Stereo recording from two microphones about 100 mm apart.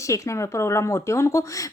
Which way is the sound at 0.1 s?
30° left (ahead or behind).